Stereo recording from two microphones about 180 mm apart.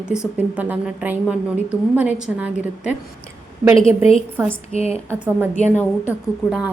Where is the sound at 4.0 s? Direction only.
35° left (ahead or behind).